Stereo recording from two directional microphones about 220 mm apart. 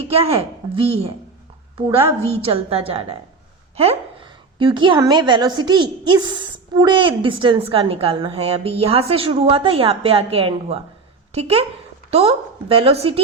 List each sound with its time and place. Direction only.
0.1 s a woman's voice: 25° right (ahead or behind)
4.5 s a woman's voice: 20° right (ahead or behind)